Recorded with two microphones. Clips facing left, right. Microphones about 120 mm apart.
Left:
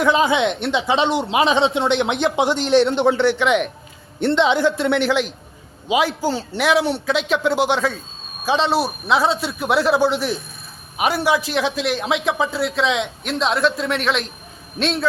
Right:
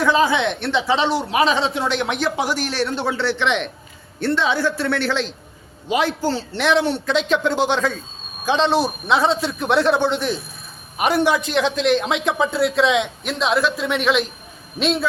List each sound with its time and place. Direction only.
0.0 s a man's voice: 20° left (ahead or behind); by 15.0 s centre (ahead or behind)